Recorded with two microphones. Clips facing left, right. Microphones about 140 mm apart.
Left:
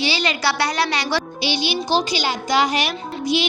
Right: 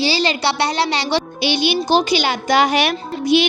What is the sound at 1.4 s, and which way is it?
A woman's voice, 55° right (ahead or behind).